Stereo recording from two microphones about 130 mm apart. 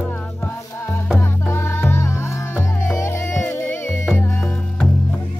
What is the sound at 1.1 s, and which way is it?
Music, 20° left (ahead or behind).